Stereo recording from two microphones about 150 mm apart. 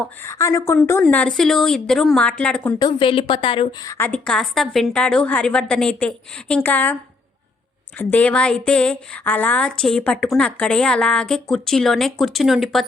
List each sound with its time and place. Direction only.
0.0 s a woman's voice: 15° left (ahead or behind)
2.7 s a woman's voice: 30° left (ahead or behind); by 6.9 s 10° left (ahead or behind)
7.9 s speech: 10° left (ahead or behind)